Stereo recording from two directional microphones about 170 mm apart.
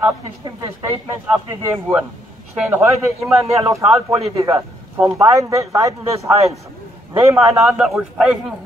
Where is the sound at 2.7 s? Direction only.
15° right (ahead or behind).